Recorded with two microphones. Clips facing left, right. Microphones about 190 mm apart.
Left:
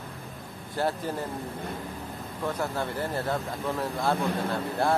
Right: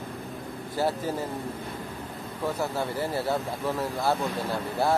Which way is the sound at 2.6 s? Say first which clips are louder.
Right 1 dB; 5° right (ahead or behind).